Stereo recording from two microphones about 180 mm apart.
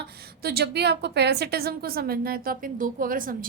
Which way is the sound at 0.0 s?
60° right (ahead or behind).